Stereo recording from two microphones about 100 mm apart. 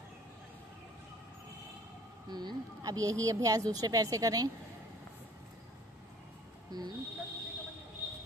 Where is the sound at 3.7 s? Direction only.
40° right (ahead or behind).